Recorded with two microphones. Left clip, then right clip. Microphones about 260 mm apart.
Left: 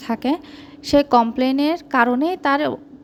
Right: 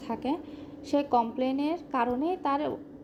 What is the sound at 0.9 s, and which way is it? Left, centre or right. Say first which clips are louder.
A woman's voice: left 11 dB; left.